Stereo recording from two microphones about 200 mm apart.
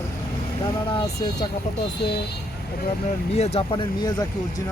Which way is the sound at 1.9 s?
55° left (ahead or behind).